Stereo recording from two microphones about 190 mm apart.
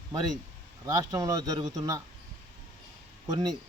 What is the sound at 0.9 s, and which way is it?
Speech, 20° right (ahead or behind).